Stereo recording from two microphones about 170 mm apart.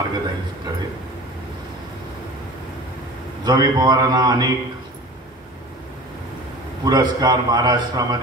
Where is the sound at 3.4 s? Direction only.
25° right (ahead or behind).